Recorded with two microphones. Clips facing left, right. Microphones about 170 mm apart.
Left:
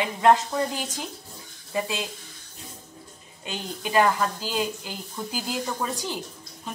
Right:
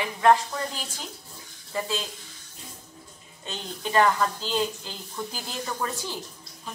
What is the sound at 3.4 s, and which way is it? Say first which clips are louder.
A woman's voice: left 1 dB; 10° left (ahead or behind).